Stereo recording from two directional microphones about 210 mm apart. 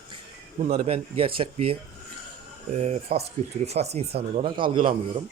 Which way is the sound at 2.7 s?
30° right (ahead or behind).